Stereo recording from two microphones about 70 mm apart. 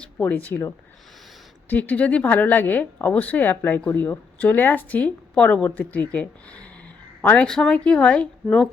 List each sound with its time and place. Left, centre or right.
0.2 s speech: left
1.7 s a woman's voice: left
7.4 s speech: centre